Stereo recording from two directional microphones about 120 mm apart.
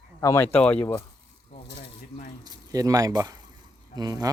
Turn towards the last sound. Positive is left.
turn(degrees=-30)  # may be behind; listen again after turning